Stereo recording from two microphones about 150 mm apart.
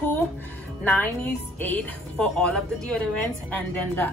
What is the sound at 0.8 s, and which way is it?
Speech, 10° left (ahead or behind).